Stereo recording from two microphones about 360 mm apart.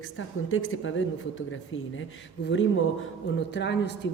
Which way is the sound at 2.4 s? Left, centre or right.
Left.